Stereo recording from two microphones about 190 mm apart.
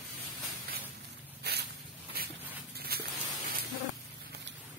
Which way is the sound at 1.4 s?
60° right (ahead or behind).